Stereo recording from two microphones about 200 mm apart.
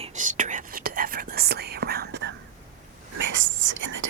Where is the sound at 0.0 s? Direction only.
40° right (ahead or behind); by 2.3 s 55° right (ahead or behind).